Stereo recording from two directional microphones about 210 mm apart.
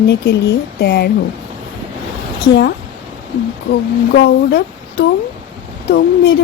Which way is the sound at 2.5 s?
55° left (ahead or behind).